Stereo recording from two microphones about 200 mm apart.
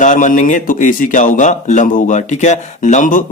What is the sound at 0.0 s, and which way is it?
Speech, 40° left (ahead or behind).